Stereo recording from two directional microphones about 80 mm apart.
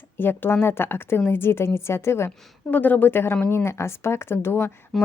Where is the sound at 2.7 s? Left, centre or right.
Left.